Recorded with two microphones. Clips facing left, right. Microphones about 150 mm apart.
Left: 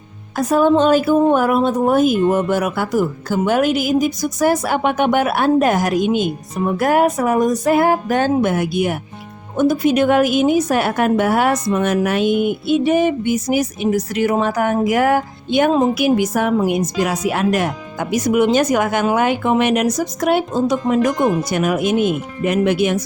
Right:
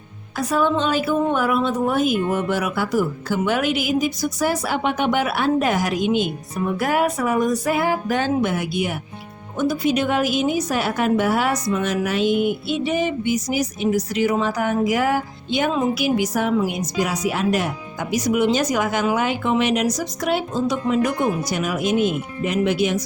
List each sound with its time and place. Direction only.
0.3 s speech: 45° left (ahead or behind)